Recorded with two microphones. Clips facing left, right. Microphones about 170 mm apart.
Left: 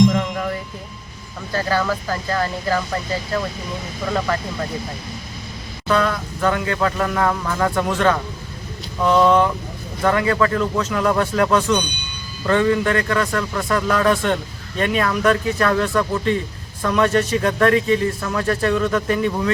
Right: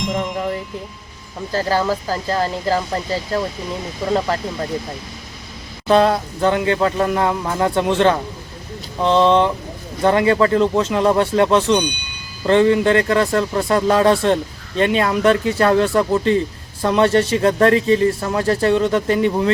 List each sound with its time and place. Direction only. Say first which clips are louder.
0.1 s music: right 1 dB; 20° right (ahead or behind)
1.5 s speech: right 2 dB; 35° right (ahead or behind)
5.9 s speech: right 5 dB; 30° right (ahead or behind)